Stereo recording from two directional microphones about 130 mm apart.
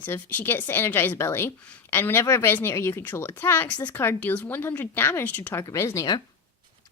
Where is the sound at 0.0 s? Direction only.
15° left (ahead or behind).